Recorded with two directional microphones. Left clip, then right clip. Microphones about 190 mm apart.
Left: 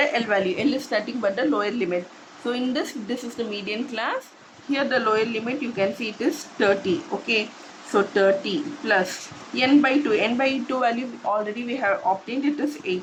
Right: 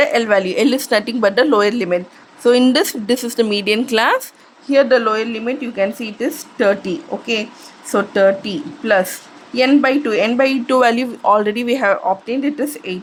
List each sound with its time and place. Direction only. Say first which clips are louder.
0.0 s a woman's voice: right 7 dB; 55° right (ahead or behind)
4.7 s speech: right 9 dB; 45° right (ahead or behind)